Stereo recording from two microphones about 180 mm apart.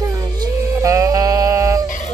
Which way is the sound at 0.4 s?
15° right (ahead or behind).